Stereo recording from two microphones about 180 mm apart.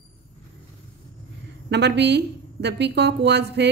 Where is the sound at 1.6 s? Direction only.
70° right (ahead or behind).